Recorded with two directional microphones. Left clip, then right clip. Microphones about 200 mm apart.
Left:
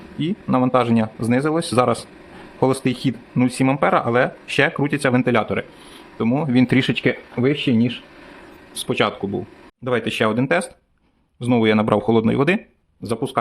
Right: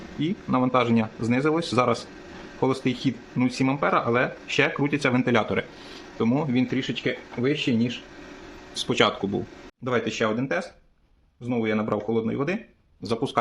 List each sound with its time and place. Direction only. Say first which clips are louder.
0.2 s speech: left 5 dB; 25° left (ahead or behind)
6.7 s speech: left 8 dB; 55° left (ahead or behind)
8.7 s speech: left 2 dB; 20° left (ahead or behind)
9.8 s speech: left 5 dB; 30° left (ahead or behind); by 12.5 s 45° left (ahead or behind)
13.0 s speech: left 3 dB; 20° left (ahead or behind)